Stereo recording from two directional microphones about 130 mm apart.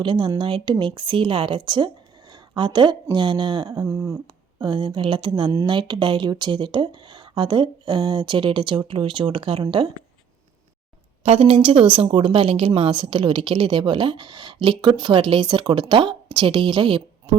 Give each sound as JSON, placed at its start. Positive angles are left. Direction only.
{"t": 0.0, "sound": "a woman's voice", "side_deg": -40}
{"t": 3.8, "sound": "a sound", "side_deg": -20}
{"t": 4.6, "sound": "a woman's voice", "side_deg": -35}
{"t": 11.2, "sound": "a woman's voice", "side_deg": -50}